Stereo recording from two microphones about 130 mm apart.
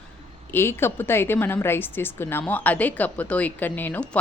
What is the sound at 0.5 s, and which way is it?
A woman's voice, 20° left (ahead or behind).